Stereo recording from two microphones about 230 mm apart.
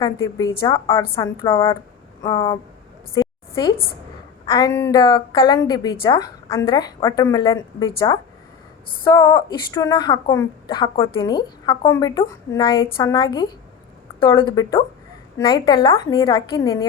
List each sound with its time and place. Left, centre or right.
0.0 s a woman's voice: centre
3.2 s a sound: centre
4.4 s a woman's voice: centre